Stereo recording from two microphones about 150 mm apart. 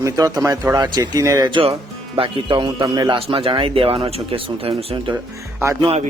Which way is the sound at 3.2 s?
40° right (ahead or behind).